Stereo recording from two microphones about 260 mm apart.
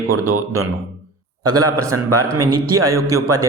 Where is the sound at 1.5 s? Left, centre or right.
Right.